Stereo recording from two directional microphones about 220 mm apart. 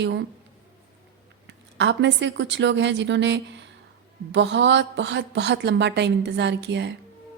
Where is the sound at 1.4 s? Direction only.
55° right (ahead or behind).